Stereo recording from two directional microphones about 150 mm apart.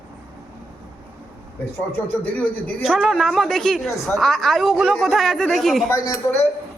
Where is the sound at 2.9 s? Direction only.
5° right (ahead or behind).